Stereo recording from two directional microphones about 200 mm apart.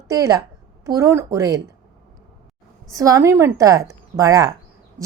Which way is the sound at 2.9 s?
15° right (ahead or behind).